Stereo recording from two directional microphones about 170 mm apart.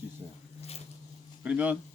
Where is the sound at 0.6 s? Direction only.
40° left (ahead or behind).